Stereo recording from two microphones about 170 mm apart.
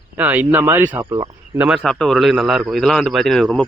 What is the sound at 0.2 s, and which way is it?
Speech, 10° right (ahead or behind).